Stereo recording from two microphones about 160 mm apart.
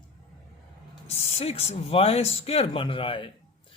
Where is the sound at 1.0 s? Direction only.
40° left (ahead or behind).